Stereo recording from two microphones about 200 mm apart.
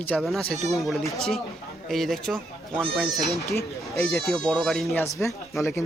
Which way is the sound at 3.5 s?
15° left (ahead or behind).